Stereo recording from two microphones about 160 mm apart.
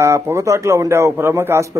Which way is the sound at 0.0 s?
15° right (ahead or behind).